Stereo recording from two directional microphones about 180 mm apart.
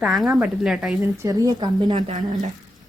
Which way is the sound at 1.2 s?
20° right (ahead or behind).